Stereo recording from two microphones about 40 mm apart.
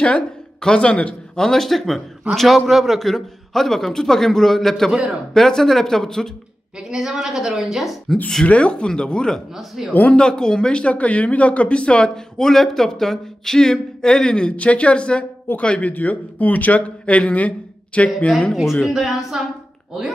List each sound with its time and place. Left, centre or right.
0.6 s a man's voice: left
6.8 s a woman's voice: centre
8.5 s speech: left
9.8 s a woman's voice: centre
10.1 s speech: centre
12.4 s a man's voice: centre
14.5 s speech: left
15.9 s speech: left
18.5 s a woman's voice: centre